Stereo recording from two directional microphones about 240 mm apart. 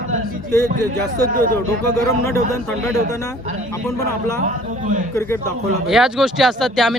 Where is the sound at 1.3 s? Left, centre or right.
Right.